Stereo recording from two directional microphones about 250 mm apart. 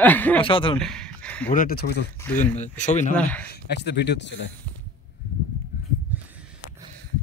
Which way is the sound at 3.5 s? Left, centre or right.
Left.